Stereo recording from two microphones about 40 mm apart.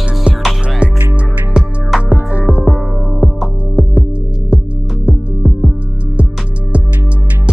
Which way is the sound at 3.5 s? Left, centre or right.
Right.